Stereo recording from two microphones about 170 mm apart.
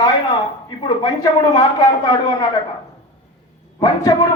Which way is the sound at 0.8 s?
25° left (ahead or behind).